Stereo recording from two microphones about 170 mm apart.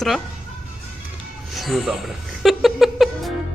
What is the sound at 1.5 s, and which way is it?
Music, centre (ahead or behind).